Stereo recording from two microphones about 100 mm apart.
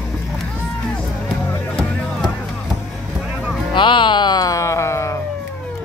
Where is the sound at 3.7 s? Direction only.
55° left (ahead or behind); by 5.2 s 30° left (ahead or behind).